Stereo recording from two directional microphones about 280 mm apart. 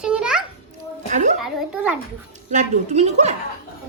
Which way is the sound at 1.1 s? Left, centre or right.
Right.